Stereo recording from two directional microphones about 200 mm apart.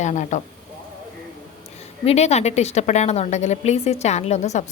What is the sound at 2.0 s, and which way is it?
A woman's voice, 35° left (ahead or behind).